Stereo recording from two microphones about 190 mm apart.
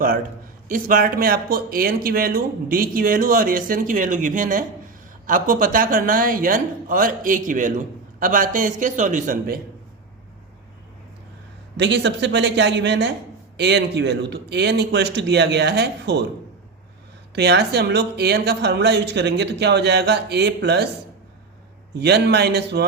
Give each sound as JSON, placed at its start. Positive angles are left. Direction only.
{"t": 0.7, "sound": "speech", "side_deg": -50}
{"t": 11.8, "sound": "a woman's voice", "side_deg": -65}
{"t": 17.3, "sound": "a woman's voice", "side_deg": -60}
{"t": 21.9, "sound": "a woman's voice", "side_deg": -60}